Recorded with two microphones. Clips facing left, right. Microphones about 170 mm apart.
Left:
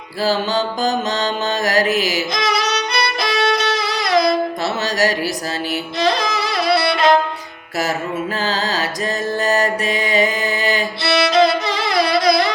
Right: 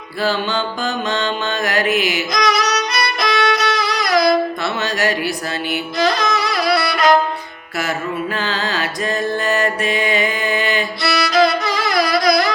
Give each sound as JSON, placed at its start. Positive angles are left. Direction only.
{"t": 0.2, "sound": "mantra", "side_deg": 40}
{"t": 5.7, "sound": "music", "side_deg": 30}
{"t": 8.4, "sound": "mantra", "side_deg": 40}
{"t": 11.1, "sound": "music", "side_deg": 25}